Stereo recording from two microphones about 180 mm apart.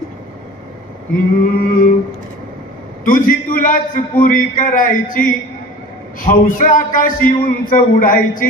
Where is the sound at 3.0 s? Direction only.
50° left (ahead or behind).